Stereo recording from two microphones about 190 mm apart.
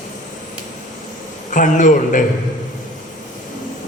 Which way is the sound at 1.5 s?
40° left (ahead or behind).